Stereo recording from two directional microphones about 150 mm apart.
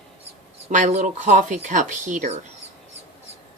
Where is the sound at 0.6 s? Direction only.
50° right (ahead or behind).